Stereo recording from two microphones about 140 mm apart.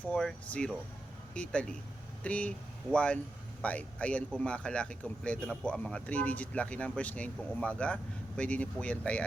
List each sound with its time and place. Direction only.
0.0 s speech: 5° left (ahead or behind)